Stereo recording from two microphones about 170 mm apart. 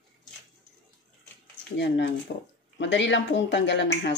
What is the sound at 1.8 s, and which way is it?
Speech, 90° left.